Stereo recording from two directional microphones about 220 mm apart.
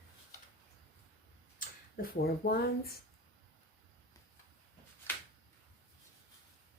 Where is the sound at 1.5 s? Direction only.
45° left (ahead or behind).